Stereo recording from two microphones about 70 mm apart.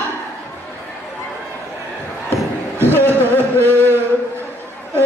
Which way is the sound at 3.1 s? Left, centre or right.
Right.